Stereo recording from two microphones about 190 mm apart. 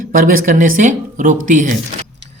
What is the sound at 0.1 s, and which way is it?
Speech, 45° right (ahead or behind).